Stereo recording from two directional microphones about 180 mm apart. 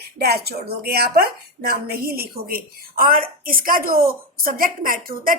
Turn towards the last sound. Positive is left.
turn(degrees=-50)  # may be behind; listen again after turning